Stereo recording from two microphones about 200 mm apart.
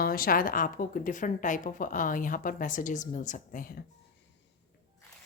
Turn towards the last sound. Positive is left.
turn(degrees=40)  # may be behind; listen again after turning